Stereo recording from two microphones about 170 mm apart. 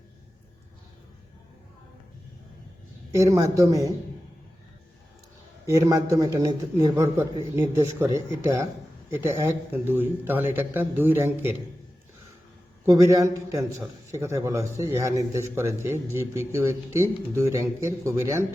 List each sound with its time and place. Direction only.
3.2 s a man's voice: 20° right (ahead or behind)
5.6 s a man's voice: 20° right (ahead or behind)
12.8 s a man's voice: 20° right (ahead or behind)